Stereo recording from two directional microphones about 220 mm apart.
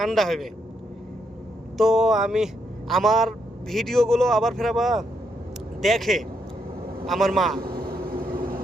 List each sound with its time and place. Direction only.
0.0 s a man's voice: centre (ahead or behind)
1.8 s a man's voice: centre (ahead or behind)
7.8 s vehicle: 40° right (ahead or behind)